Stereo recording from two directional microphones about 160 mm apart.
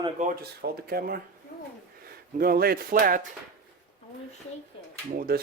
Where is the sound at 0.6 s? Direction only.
70° right (ahead or behind).